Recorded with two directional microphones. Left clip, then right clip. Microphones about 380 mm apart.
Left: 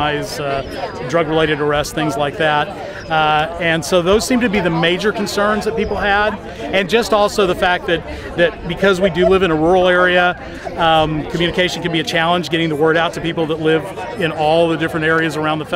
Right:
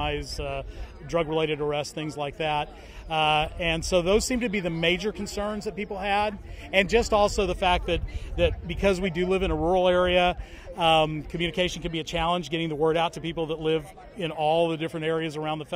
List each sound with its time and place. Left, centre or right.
0.0 s a man's voice: right